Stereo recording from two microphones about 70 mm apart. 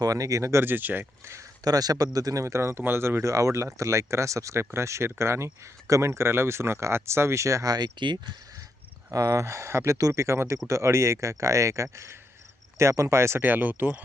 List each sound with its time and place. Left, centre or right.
0.0 s speech: right
0.6 s speech: right
1.2 s speech: right
1.6 s speech: right
3.2 s speech: right
8.0 s speech: right
9.1 s speech: right
13.4 s speech: right